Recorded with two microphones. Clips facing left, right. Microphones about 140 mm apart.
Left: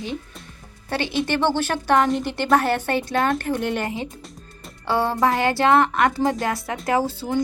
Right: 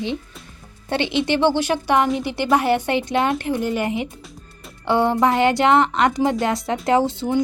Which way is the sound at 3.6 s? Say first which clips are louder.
Right 2 dB; 5° right (ahead or behind).